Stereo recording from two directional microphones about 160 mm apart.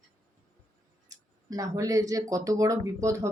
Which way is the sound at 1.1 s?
20° right (ahead or behind).